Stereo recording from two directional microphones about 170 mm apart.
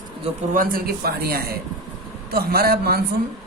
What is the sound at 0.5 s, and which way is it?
Speech, 55° right (ahead or behind).